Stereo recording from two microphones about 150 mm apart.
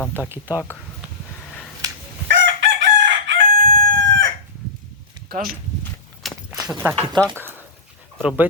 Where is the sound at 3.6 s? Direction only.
70° right (ahead or behind).